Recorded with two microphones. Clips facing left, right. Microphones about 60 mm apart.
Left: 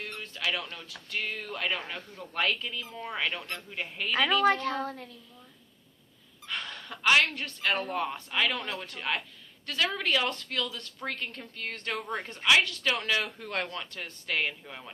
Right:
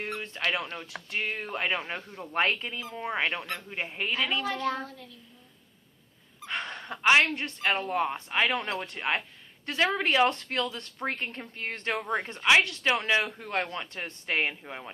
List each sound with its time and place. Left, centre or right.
0.5 s a man's voice: right
4.4 s a woman's voice: left
6.5 s a sound: right
7.3 s a man's voice: right